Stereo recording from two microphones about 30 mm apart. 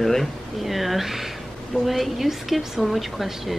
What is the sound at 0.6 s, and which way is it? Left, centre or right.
Speech, centre.